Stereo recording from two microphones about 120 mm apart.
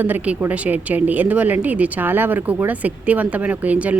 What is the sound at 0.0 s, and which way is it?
Speech, 15° right (ahead or behind).